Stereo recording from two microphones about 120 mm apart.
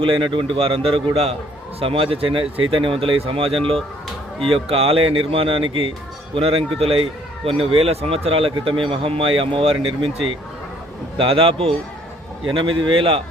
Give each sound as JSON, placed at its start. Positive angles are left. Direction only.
{"t": 0.0, "sound": "speech", "side_deg": -45}